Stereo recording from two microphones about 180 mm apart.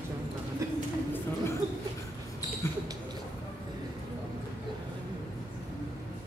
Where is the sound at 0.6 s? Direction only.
15° right (ahead or behind).